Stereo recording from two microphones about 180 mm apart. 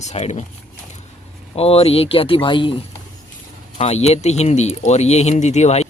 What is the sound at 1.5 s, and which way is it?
Speech, 35° left (ahead or behind).